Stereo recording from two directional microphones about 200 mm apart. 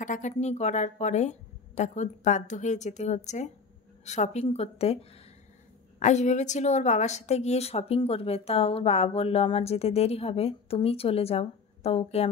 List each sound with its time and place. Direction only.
0.0 s a woman's voice: 40° left (ahead or behind)
5.9 s a woman's voice: 35° left (ahead or behind)